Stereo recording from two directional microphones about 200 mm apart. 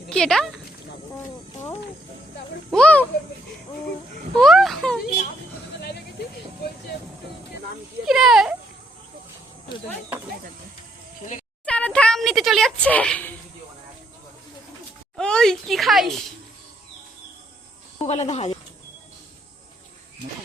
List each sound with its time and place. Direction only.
0.1 s speech: centre (ahead or behind)
2.6 s speech: 5° left (ahead or behind)
4.4 s speech: centre (ahead or behind)
8.0 s speech: centre (ahead or behind)
11.6 s speech: 5° left (ahead or behind)
15.1 s speech: 5° left (ahead or behind)
18.0 s speech: 35° left (ahead or behind)